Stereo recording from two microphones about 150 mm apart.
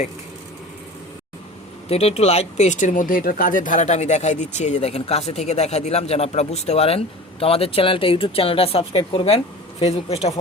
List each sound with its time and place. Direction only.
1.9 s a man's voice: 45° left (ahead or behind)